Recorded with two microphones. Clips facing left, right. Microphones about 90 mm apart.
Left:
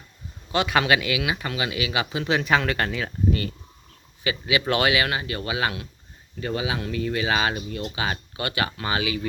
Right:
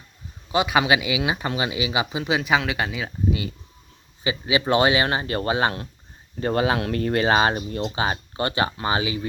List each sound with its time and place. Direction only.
0.5 s speech: 15° right (ahead or behind)
4.2 s speech: 25° right (ahead or behind)